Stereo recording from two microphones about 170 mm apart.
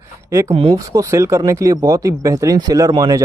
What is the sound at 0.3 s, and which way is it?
Speech, 15° right (ahead or behind).